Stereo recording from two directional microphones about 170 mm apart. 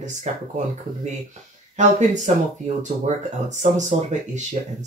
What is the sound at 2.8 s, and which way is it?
Speech, 45° right (ahead or behind).